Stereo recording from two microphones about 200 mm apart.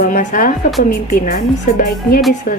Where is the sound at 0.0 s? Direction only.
40° left (ahead or behind).